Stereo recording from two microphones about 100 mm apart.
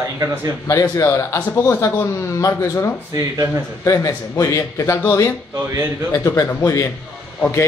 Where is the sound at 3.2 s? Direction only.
35° right (ahead or behind).